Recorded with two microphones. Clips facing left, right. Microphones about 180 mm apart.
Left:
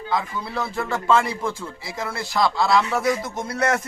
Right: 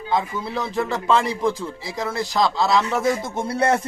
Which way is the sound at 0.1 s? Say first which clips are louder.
Right 3 dB; 25° right (ahead or behind).